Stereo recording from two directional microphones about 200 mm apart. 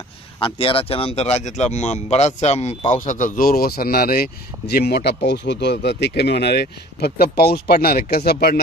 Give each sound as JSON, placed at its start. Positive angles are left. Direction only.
{"t": 0.4, "sound": "speech", "side_deg": 25}